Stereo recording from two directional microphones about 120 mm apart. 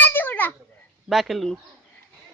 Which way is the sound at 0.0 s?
15° left (ahead or behind).